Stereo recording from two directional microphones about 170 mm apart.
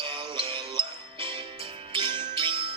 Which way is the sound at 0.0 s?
30° right (ahead or behind).